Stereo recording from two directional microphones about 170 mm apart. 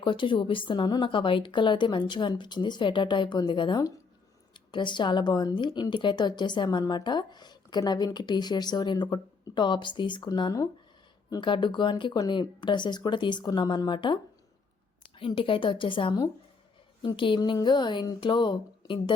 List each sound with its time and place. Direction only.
0.0 s a woman's voice: 30° left (ahead or behind)
15.2 s a woman's voice: 30° left (ahead or behind)